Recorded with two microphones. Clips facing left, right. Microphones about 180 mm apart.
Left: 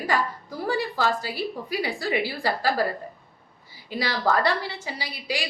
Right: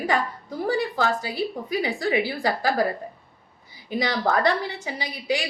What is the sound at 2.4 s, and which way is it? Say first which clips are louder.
Speech: right 1 dB; 20° right (ahead or behind).